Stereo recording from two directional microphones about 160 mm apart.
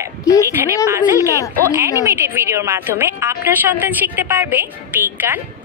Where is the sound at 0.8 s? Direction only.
20° right (ahead or behind).